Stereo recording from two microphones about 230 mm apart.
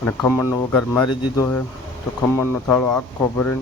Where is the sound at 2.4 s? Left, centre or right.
Centre.